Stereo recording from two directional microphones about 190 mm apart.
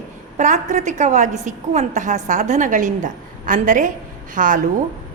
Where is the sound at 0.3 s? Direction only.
40° right (ahead or behind).